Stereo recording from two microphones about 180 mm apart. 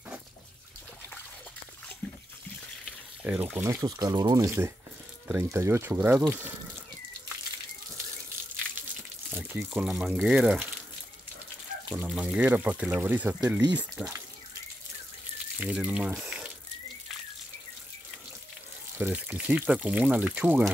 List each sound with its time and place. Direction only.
2.8 s water: 5° right (ahead or behind)
3.8 s speech: 25° right (ahead or behind)
9.3 s speech: 10° right (ahead or behind)
11.9 s speech: 5° right (ahead or behind)
15.6 s speech: 5° right (ahead or behind)
18.9 s speech: 10° right (ahead or behind)